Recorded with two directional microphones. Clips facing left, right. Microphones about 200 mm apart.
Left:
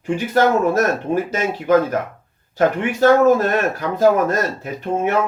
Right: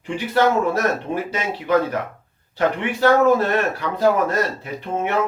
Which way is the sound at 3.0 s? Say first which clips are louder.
Left 3 dB; 45° left (ahead or behind).